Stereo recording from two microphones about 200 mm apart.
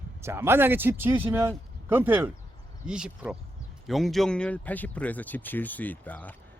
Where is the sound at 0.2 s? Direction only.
10° right (ahead or behind).